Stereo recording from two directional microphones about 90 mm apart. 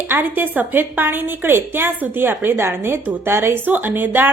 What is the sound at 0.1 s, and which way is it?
A woman's voice, 20° right (ahead or behind).